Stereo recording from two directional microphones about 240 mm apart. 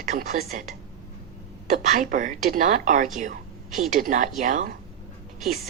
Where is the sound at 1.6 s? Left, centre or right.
Right.